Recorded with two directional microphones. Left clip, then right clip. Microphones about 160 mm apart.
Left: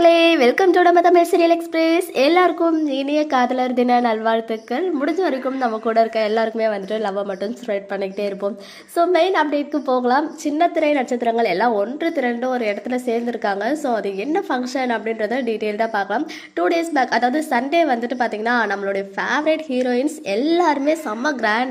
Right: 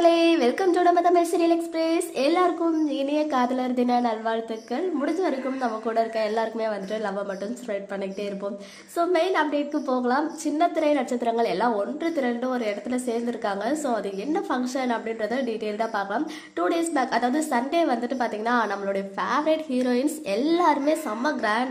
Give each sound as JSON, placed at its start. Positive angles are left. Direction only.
{"t": 0.0, "sound": "child singing", "side_deg": 35}
{"t": 8.9, "sound": "a woman's voice", "side_deg": 25}